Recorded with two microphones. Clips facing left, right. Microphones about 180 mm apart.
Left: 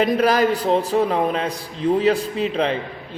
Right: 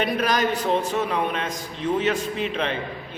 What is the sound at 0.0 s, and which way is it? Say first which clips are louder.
A man's voice: left 6 dB; 35° left (ahead or behind).